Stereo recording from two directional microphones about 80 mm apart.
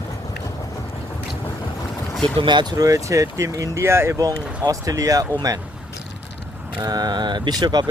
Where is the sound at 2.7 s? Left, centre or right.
Right.